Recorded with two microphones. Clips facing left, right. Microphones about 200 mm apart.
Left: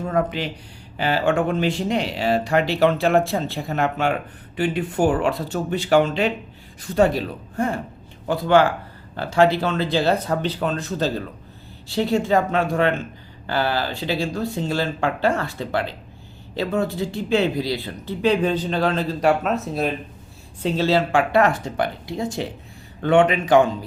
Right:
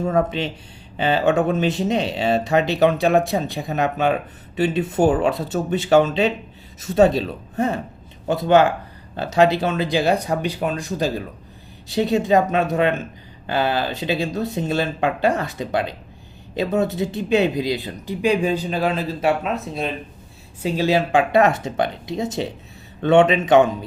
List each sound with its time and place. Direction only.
0.0 s speech: 25° right (ahead or behind); by 19.9 s centre (ahead or behind)
20.6 s speech: 10° right (ahead or behind)